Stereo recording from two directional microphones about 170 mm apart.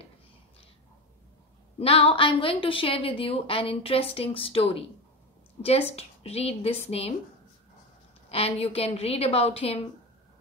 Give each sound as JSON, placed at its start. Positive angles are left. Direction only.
{"t": 1.8, "sound": "a woman's voice", "side_deg": 35}
{"t": 8.3, "sound": "a woman's voice", "side_deg": 35}